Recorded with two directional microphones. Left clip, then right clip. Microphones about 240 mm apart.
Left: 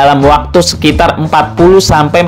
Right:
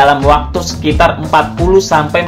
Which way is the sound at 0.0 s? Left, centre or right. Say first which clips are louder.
Left 2 dB; left.